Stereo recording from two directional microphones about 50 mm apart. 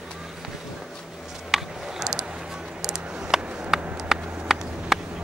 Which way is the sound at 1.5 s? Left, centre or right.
Centre.